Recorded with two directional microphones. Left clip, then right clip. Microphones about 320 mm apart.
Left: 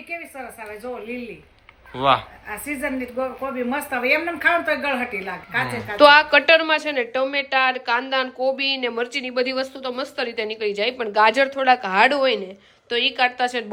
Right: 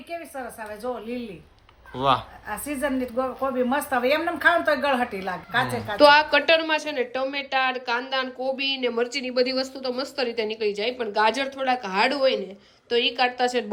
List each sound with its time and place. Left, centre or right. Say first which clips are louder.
2.0 s a woman's voice: left 3 dB; centre